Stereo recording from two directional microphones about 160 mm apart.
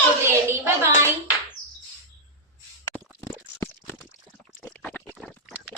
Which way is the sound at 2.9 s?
10° right (ahead or behind).